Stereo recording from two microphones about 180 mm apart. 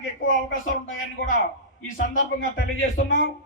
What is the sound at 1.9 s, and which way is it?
Speech, 45° left (ahead or behind).